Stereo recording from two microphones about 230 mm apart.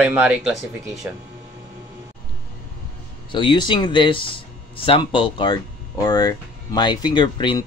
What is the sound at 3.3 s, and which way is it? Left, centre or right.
Speech, centre.